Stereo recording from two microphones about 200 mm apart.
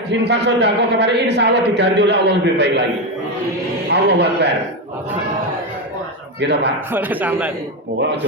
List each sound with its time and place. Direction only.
0.1 s speech: 60° right (ahead or behind)
3.8 s speech: 60° right (ahead or behind)
6.5 s speech: 60° right (ahead or behind)
6.9 s speech: 10° right (ahead or behind)